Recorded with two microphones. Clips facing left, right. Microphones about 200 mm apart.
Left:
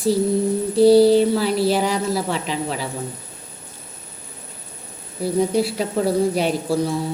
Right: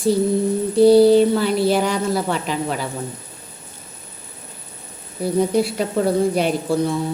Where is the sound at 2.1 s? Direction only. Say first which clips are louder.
Right 1 dB; 50° right (ahead or behind).